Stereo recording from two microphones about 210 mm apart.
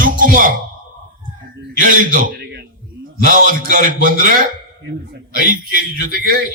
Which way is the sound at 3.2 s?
40° right (ahead or behind).